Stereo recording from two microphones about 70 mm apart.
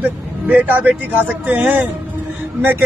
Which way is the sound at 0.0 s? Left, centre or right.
Right.